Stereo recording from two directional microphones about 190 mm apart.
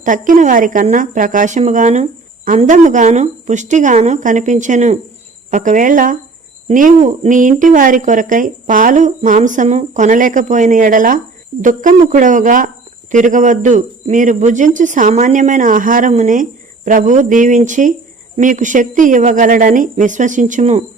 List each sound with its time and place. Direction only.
0.0 s speech: 40° right (ahead or behind)